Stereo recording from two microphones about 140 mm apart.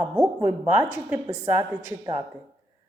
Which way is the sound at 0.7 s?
15° right (ahead or behind).